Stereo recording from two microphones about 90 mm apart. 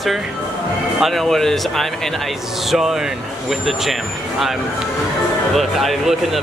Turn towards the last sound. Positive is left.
turn(degrees=0)  # may be behind; listen again after turning